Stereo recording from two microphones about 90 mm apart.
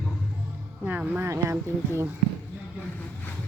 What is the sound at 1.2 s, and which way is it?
Speech, 30° right (ahead or behind).